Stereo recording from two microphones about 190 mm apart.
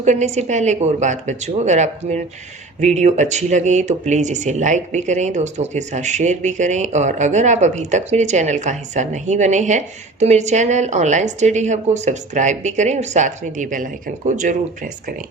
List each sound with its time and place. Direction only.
0.0 s speech: 40° right (ahead or behind)